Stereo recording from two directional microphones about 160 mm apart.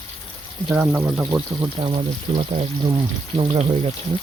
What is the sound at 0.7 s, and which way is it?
Speech, 5° right (ahead or behind).